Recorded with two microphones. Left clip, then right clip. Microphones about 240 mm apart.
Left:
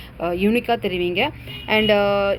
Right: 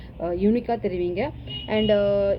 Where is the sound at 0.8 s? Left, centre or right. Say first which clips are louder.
Left 4 dB; left.